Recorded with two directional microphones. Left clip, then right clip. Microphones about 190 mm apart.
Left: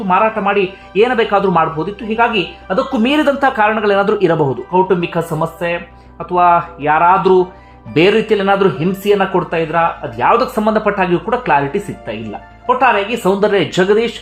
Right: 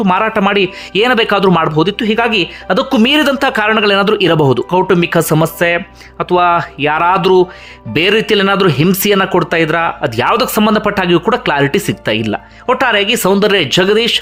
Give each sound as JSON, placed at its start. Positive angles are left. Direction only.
{"t": 0.1, "sound": "speech", "side_deg": -30}